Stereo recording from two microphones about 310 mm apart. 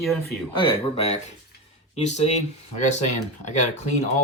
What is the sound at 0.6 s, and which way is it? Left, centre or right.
Speech, centre.